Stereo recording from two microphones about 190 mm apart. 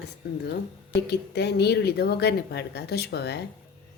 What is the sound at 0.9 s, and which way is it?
Speech, 60° left (ahead or behind).